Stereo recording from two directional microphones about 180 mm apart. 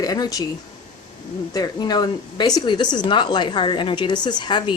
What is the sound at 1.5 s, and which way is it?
A woman's voice, 20° left (ahead or behind).